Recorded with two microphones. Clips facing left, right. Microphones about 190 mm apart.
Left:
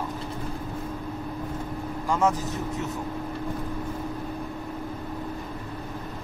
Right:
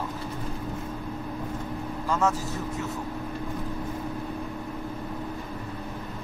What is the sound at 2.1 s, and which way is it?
Speech, 15° left (ahead or behind).